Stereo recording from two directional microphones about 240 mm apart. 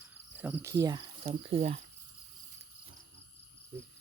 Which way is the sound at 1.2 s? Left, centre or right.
Right.